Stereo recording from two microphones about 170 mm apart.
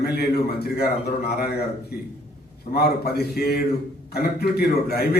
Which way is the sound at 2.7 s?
65° left (ahead or behind).